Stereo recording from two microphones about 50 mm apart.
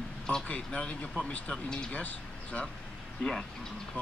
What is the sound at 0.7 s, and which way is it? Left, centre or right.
Speech, left.